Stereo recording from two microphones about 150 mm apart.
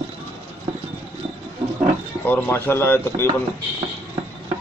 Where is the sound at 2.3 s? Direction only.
10° left (ahead or behind).